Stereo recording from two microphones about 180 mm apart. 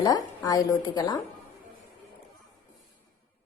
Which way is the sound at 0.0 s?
20° left (ahead or behind).